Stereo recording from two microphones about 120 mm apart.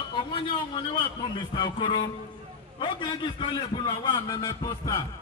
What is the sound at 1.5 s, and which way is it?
A man's voice, 40° left (ahead or behind).